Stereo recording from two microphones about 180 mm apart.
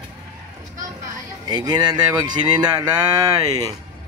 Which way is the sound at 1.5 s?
25° right (ahead or behind).